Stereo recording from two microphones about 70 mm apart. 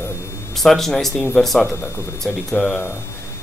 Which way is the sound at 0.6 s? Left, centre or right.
Centre.